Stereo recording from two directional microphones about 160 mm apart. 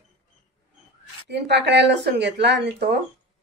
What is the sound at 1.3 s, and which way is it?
Speech, 90° right.